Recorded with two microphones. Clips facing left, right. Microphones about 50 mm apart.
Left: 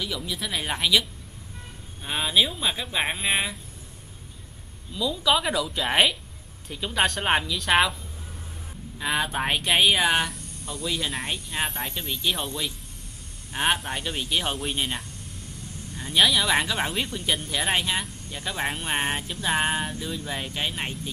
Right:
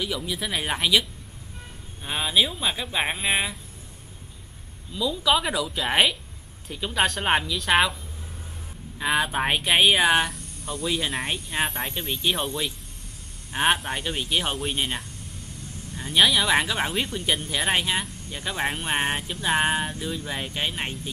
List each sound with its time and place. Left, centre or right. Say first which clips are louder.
0.0 s speech: right 2 dB; centre
2.0 s speech: even; centre
4.9 s speech: right 1 dB; centre
8.9 s speech: right 2 dB; centre
10.3 s cricket: right 2 dB; centre
10.9 s speech: right 2 dB; centre
13.5 s speech: right 2 dB; centre